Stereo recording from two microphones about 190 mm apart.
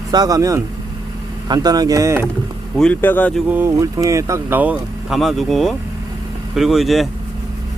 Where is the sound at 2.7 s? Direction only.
5° left (ahead or behind).